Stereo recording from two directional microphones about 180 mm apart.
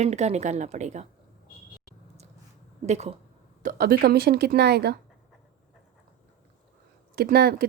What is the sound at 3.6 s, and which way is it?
A woman's voice, 50° right (ahead or behind).